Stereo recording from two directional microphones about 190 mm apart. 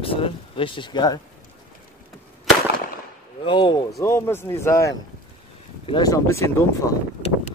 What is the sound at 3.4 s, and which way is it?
Speech, 25° left (ahead or behind).